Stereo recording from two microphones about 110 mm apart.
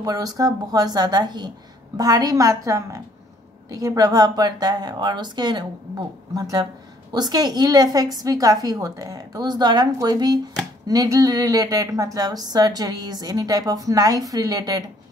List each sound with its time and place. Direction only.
0.0 s a woman's voice: 35° right (ahead or behind)